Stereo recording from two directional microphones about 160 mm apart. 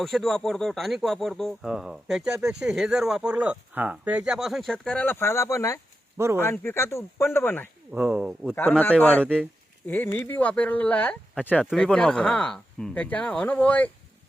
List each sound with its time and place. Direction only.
0.0 s speech: centre (ahead or behind); by 5.8 s 20° left (ahead or behind)
6.1 s speech: 15° right (ahead or behind)
6.4 s speech: 15° left (ahead or behind)
7.9 s speech: 5° right (ahead or behind)
8.5 s speech: 10° left (ahead or behind)